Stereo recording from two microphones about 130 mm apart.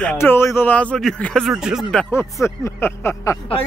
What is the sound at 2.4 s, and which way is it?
Speech, 20° left (ahead or behind).